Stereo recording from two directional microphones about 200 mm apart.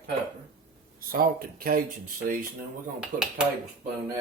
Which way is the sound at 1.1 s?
45° right (ahead or behind).